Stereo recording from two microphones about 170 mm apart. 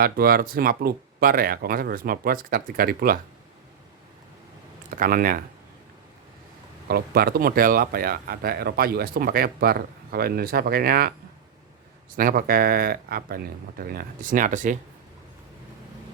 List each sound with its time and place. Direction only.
0.0 s speech: 60° right (ahead or behind)
4.9 s speech: 55° right (ahead or behind)
6.8 s speech: 65° right (ahead or behind)
12.1 s speech: 60° right (ahead or behind)